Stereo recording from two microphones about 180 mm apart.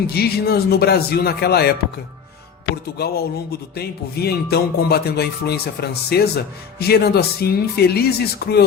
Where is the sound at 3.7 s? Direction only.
60° left (ahead or behind).